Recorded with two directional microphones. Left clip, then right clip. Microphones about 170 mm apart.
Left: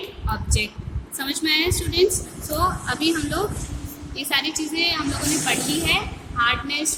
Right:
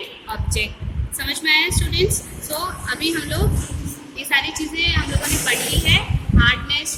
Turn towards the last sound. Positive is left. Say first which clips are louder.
# right 3 dB
turn(degrees=55)  # may be behind; listen again after turning